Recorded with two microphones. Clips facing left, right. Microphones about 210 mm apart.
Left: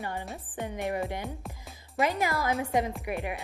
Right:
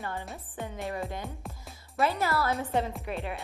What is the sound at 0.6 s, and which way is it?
A woman's voice, 15° left (ahead or behind).